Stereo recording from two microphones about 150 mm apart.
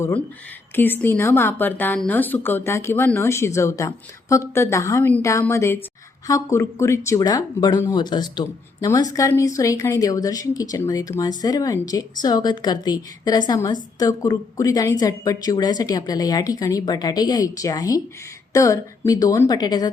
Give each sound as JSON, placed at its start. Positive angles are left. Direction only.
{"t": 0.8, "sound": "speech", "side_deg": 15}